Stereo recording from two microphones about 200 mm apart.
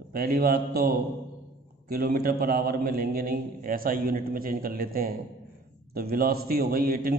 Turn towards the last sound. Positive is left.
turn(degrees=-45)  # may be behind; listen again after turning